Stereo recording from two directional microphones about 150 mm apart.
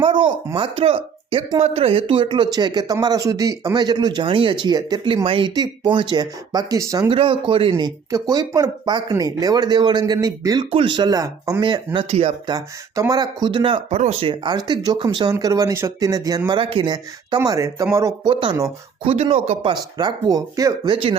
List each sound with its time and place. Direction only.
0.0 s speech: 35° right (ahead or behind)
7.1 s speech: 35° right (ahead or behind)
11.9 s speech: 35° right (ahead or behind)
12.5 s speech: 25° right (ahead or behind)
16.5 s speech: 35° right (ahead or behind)
19.7 s speech: 25° right (ahead or behind)
20.9 s speech: 40° right (ahead or behind)